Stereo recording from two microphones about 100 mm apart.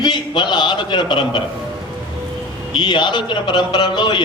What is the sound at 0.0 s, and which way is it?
A man's voice, 50° left (ahead or behind).